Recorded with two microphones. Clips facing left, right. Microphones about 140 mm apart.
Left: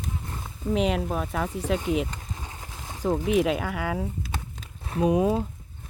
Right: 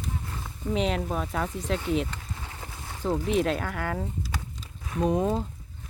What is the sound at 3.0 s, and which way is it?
Speech, 10° left (ahead or behind).